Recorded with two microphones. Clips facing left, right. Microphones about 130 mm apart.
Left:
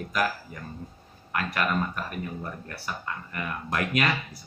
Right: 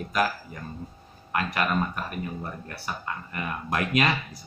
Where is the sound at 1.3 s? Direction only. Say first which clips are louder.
Right 1 dB; 20° right (ahead or behind).